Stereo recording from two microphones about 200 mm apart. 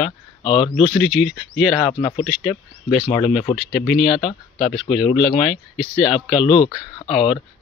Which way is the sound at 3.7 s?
Centre (ahead or behind).